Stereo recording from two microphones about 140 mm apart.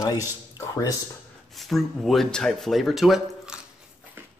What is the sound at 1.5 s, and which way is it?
Speech, centre (ahead or behind).